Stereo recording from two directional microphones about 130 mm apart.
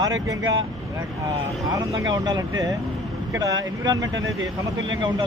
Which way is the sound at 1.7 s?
30° right (ahead or behind).